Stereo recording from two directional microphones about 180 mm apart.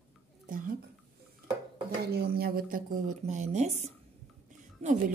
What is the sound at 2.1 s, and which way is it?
Speech, 60° right (ahead or behind).